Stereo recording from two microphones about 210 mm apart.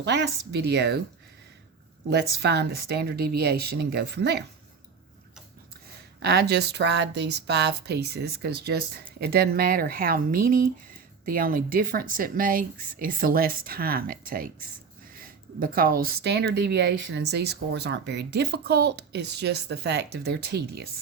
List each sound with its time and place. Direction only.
0.0 s a woman's voice: 55° right (ahead or behind)
2.0 s a woman's voice: 55° right (ahead or behind)
6.2 s a woman's voice: 50° right (ahead or behind)